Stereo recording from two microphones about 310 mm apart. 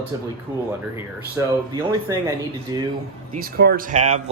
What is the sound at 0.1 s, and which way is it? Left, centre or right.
A man's voice, centre.